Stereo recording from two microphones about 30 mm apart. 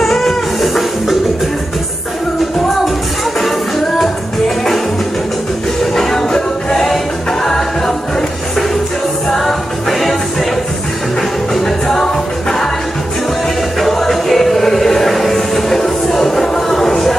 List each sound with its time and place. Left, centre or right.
0.0 s music: centre
5.9 s music: centre
9.3 s music: centre
11.5 s music: centre
13.7 s music: centre